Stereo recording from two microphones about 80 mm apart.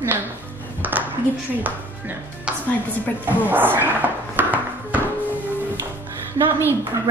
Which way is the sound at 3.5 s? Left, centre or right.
Right.